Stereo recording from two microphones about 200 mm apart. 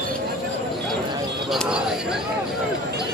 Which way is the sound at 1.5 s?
Centre (ahead or behind).